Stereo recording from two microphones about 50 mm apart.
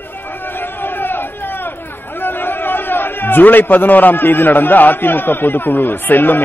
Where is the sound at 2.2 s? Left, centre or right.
Left.